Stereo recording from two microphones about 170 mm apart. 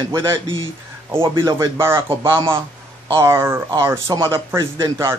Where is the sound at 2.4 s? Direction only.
30° right (ahead or behind).